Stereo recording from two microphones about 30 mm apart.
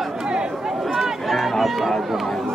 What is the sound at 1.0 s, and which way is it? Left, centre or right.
Run, centre.